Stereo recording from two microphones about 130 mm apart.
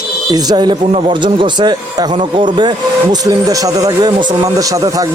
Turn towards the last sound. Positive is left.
turn(degrees=-25)  # may be behind; listen again after turning